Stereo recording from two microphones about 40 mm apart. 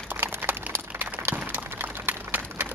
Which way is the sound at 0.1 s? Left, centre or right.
Right.